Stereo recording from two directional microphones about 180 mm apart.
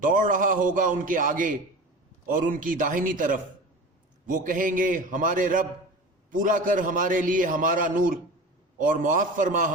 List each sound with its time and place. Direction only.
0.0 s a man's voice: 45° right (ahead or behind)